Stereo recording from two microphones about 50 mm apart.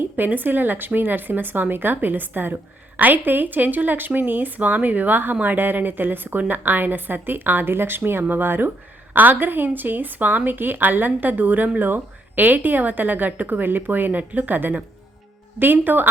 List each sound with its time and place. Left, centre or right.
0.0 s a woman's voice: right